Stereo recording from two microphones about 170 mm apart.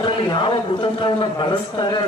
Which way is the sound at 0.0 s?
30° left (ahead or behind).